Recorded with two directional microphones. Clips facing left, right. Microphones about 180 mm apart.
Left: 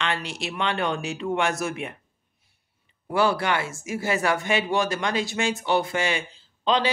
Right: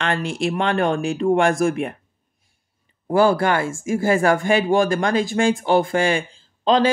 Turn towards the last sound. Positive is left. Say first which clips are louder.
# right 6 dB
turn(degrees=-45)  # may be behind; listen again after turning